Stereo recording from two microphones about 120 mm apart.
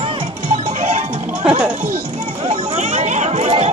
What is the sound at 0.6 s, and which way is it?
Music, 90° right.